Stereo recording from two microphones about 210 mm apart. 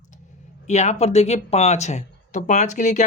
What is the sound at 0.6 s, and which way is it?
Speech, 30° left (ahead or behind).